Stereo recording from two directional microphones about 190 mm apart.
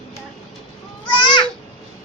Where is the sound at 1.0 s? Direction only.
25° left (ahead or behind).